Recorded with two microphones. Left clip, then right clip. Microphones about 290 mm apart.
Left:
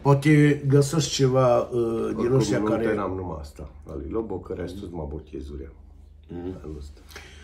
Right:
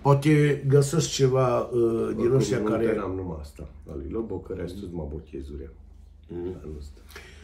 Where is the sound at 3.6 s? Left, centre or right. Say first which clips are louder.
Left 2 dB; left.